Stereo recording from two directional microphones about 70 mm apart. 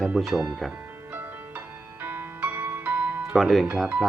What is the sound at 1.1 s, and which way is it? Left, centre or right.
Music, right.